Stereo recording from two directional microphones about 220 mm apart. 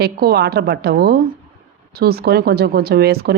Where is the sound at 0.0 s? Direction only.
45° right (ahead or behind).